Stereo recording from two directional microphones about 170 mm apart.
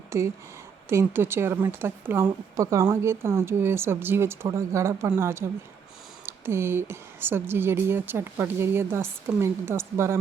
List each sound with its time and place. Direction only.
0.1 s speech: 15° right (ahead or behind)